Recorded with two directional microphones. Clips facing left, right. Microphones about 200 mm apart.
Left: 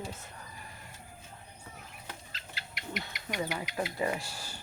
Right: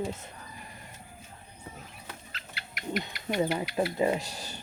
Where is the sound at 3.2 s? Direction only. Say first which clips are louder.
Right 7 dB; 25° right (ahead or behind).